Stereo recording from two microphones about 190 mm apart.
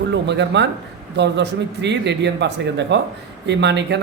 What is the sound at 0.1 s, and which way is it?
Speech, 65° right (ahead or behind).